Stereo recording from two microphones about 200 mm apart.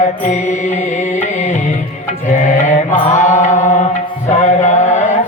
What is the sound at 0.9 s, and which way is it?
Music, 35° left (ahead or behind).